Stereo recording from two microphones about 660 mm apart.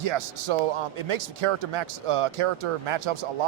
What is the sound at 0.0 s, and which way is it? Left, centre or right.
Speech, right.